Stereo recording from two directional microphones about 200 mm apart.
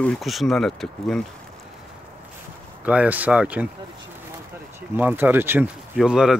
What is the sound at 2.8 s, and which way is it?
Speech, 5° right (ahead or behind).